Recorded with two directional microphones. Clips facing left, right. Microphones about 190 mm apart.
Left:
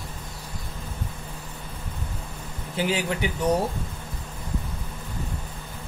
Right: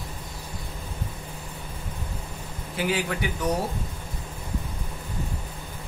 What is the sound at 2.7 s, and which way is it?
Speech, 25° left (ahead or behind).